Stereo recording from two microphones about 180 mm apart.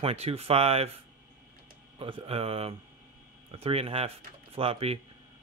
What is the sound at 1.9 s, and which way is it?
Speech, 30° right (ahead or behind).